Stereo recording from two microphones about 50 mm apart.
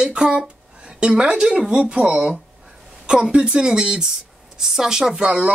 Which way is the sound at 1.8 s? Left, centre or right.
Right.